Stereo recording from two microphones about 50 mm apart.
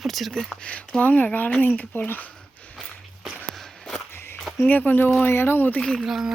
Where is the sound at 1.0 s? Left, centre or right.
Left.